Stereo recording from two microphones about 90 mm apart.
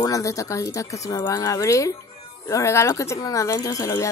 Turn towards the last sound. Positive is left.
turn(degrees=35)  # may be behind; listen again after turning